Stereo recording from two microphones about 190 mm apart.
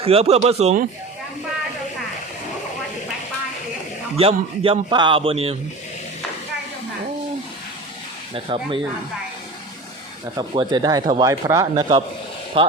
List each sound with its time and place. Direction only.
0.0 s speech: 30° right (ahead or behind)
4.2 s a man's voice: 30° right (ahead or behind)
8.3 s a man's voice: 30° right (ahead or behind)
10.3 s a man's voice: 25° right (ahead or behind)